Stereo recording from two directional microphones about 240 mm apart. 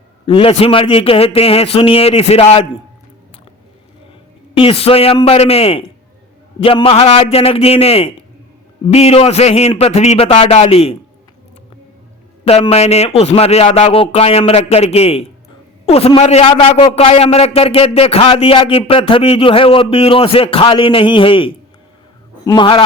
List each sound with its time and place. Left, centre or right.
0.3 s a man's voice: left
4.5 s a man's voice: left
12.5 s a man's voice: left